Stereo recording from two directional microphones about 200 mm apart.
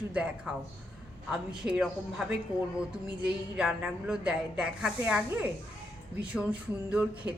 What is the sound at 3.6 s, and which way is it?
A woman's voice, 5° right (ahead or behind).